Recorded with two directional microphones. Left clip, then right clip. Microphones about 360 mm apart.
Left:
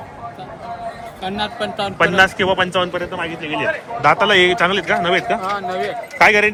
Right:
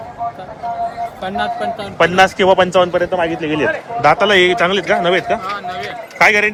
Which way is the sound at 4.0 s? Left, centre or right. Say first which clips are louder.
Right 2 dB; centre.